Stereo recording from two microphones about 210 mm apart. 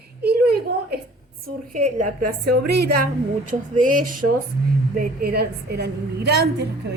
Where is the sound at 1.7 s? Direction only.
40° right (ahead or behind).